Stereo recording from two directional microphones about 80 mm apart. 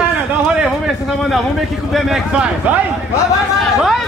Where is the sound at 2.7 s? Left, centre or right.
Centre.